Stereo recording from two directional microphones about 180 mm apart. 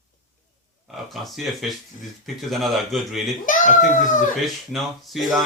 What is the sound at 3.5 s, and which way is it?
Speech, 45° left (ahead or behind).